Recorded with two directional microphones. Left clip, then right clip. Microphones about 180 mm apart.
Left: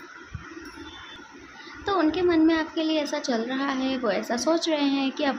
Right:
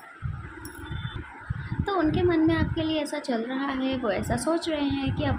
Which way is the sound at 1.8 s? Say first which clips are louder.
Left 2 dB; 10° left (ahead or behind).